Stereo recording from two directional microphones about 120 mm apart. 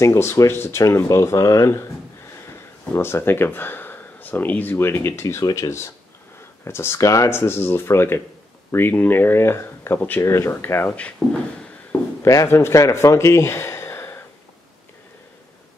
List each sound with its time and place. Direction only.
0.0 s speech: 20° left (ahead or behind)
2.9 s speech: 20° left (ahead or behind)
12.2 s speech: 25° left (ahead or behind)